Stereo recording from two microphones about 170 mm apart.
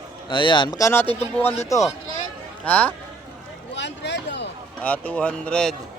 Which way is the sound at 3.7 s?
90° left.